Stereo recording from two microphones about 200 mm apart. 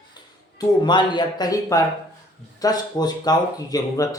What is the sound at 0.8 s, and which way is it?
A man's voice, 20° left (ahead or behind).